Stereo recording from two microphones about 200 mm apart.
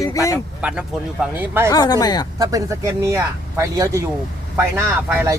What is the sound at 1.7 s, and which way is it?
Speech, 20° left (ahead or behind).